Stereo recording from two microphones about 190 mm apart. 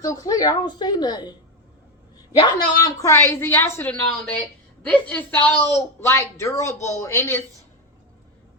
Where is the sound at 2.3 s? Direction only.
20° left (ahead or behind).